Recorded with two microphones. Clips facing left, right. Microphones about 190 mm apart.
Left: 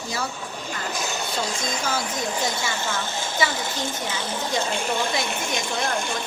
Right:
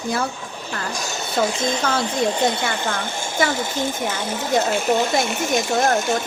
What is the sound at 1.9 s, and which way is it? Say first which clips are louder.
Speech: right 6 dB; 25° right (ahead or behind).